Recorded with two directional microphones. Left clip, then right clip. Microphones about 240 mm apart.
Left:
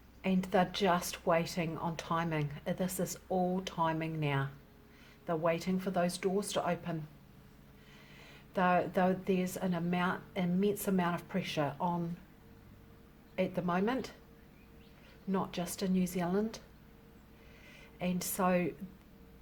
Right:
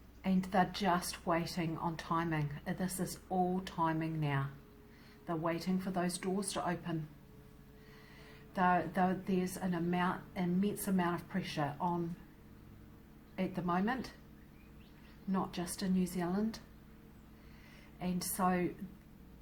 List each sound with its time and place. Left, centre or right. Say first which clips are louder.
0.2 s a woman's voice: left 2 dB; left
8.5 s a woman's voice: left 2 dB; left
13.3 s a woman's voice: left 3 dB; left
15.3 s a woman's voice: left 2 dB; left
18.0 s a woman's voice: left 2 dB; left